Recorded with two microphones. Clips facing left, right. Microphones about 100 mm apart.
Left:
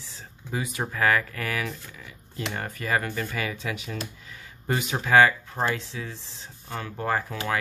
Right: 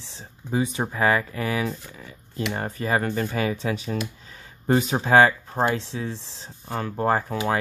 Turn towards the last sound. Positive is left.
turn(degrees=-30)  # may be behind; listen again after turning